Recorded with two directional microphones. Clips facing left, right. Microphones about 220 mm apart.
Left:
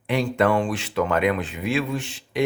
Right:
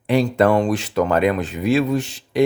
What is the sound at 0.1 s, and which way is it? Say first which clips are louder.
Speech: right 5 dB; 35° right (ahead or behind).